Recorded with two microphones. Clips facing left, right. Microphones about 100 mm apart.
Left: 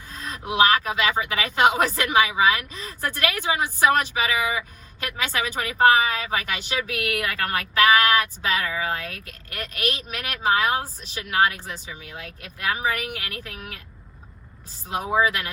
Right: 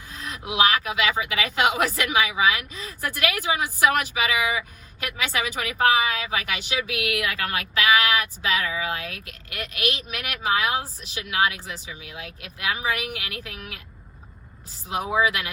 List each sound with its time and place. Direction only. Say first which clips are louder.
0.3 s a woman's voice: left 3 dB; 40° left (ahead or behind)